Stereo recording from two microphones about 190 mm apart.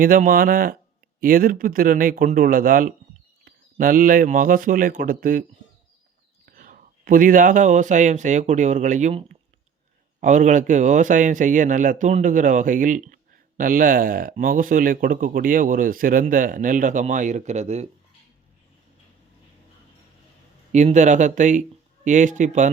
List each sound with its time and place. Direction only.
0.0 s speech: 45° right (ahead or behind)
20.7 s speech: 40° right (ahead or behind)